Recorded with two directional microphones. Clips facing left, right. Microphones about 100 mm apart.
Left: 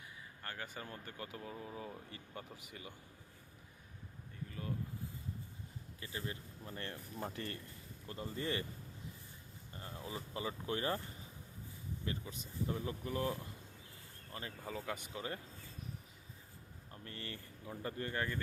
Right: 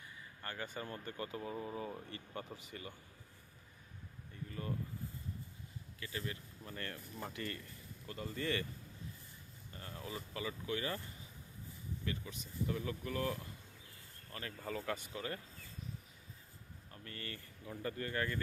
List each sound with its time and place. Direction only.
0.4 s speech: 5° left (ahead or behind)
4.4 s speech: centre (ahead or behind)
6.0 s speech: 25° left (ahead or behind)
9.7 s speech: 20° left (ahead or behind)
12.0 s speech: 25° left (ahead or behind)
14.6 s speech: 10° left (ahead or behind)
14.9 s speech: 20° left (ahead or behind)
16.9 s speech: 25° left (ahead or behind)